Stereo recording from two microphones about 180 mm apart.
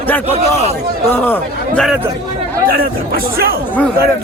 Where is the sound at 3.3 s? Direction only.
55° right (ahead or behind).